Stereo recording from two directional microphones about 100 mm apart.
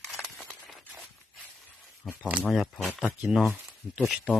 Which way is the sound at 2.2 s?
15° right (ahead or behind).